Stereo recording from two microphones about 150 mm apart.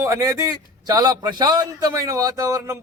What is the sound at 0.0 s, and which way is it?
A man's voice, 20° right (ahead or behind).